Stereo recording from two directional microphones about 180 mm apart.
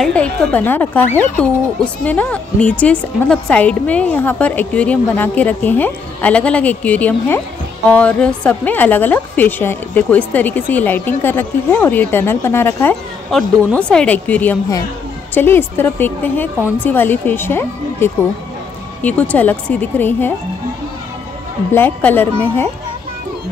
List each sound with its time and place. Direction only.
0.0 s a woman's voice: 5° left (ahead or behind)
13.3 s a woman's voice: centre (ahead or behind)
21.7 s a woman's voice: 10° left (ahead or behind)